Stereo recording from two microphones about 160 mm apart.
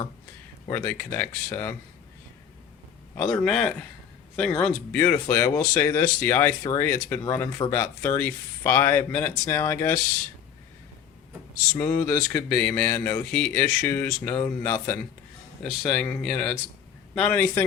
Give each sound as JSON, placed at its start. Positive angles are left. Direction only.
{"t": 0.7, "sound": "speech", "side_deg": 15}
{"t": 3.2, "sound": "speech", "side_deg": 5}
{"t": 6.6, "sound": "speech", "side_deg": 25}
{"t": 6.8, "sound": "speech", "side_deg": 10}
{"t": 11.7, "sound": "speech", "side_deg": 10}